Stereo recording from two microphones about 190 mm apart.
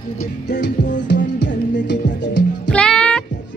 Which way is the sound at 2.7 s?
5° left (ahead or behind).